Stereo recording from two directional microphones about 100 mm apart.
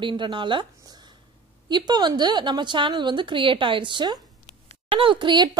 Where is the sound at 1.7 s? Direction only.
50° right (ahead or behind).